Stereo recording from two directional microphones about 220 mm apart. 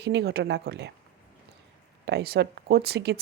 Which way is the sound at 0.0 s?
50° right (ahead or behind).